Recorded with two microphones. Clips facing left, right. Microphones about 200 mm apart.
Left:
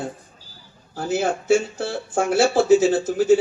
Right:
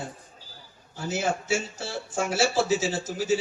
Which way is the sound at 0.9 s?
55° left (ahead or behind).